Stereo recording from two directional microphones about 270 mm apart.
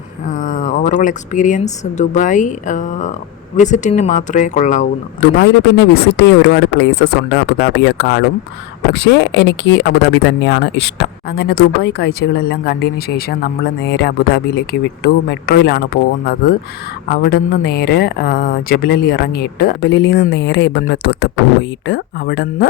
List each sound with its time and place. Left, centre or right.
0.3 s speech: left